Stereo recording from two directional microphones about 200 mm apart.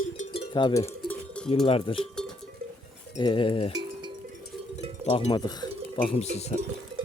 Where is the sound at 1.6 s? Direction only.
25° left (ahead or behind).